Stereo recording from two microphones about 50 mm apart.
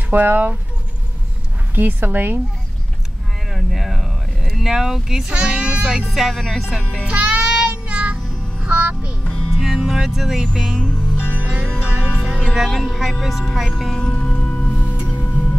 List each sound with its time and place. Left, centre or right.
0.1 s speech: right
1.8 s speech: right
3.4 s a sound: centre
4.6 s speech: centre
5.3 s speech: centre
6.0 s speech: centre
7.1 s music: right
9.2 s music: centre
9.6 s music: centre
11.1 s music: left
11.8 s music: right
12.3 s music: centre
12.5 s speech: centre
13.9 s music: centre